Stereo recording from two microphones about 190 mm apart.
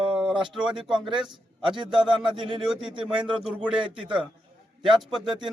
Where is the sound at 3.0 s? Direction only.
5° right (ahead or behind).